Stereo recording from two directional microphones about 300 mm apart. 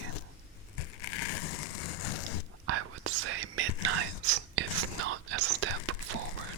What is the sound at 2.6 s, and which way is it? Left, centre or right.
Whispering, right.